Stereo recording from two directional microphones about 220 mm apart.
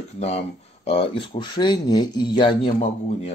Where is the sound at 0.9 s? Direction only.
25° left (ahead or behind).